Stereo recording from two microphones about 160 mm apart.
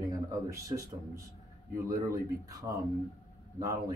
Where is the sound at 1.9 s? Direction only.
20° right (ahead or behind).